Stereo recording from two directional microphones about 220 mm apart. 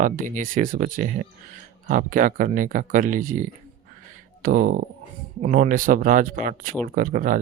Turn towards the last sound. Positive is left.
turn(degrees=-40)  # may be behind; listen again after turning